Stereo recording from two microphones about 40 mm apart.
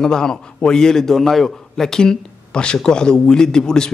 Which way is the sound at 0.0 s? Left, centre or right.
Centre.